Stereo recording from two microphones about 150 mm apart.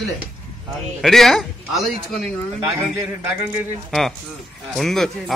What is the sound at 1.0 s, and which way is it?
Speech, centre (ahead or behind).